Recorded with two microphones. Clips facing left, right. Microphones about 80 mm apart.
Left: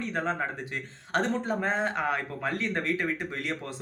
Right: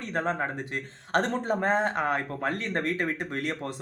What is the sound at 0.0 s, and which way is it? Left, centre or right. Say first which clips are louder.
Speech: right 1 dB; right.